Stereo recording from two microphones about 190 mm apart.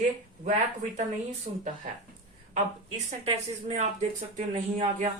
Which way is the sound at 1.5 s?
35° right (ahead or behind).